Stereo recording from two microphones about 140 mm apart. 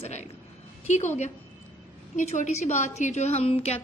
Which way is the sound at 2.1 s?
60° left (ahead or behind).